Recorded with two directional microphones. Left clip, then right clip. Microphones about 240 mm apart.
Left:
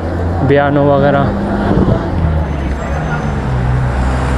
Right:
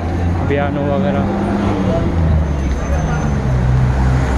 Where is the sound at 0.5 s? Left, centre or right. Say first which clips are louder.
Left 8 dB; left.